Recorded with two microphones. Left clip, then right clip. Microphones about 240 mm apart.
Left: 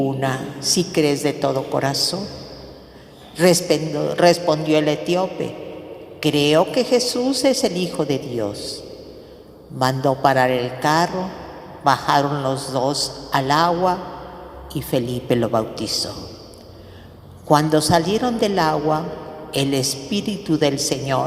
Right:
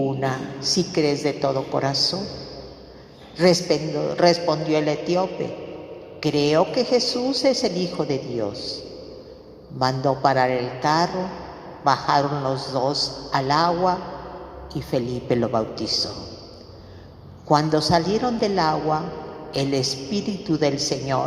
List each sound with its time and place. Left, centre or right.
0.0 s a man's voice: left
3.3 s a man's voice: left
17.5 s a man's voice: left